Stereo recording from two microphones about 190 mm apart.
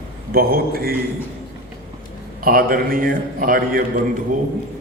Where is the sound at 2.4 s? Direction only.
50° right (ahead or behind).